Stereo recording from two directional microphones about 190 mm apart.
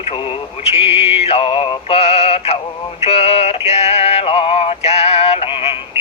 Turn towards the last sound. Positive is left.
turn(degrees=30)  # may be behind; listen again after turning